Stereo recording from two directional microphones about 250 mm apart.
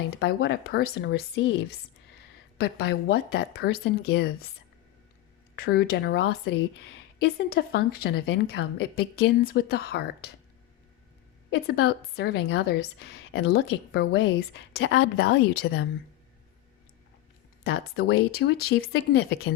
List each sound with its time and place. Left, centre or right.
0.1 s a woman's voice: left
2.6 s a woman's voice: left
5.6 s a woman's voice: left
11.5 s a woman's voice: left
17.6 s a woman's voice: left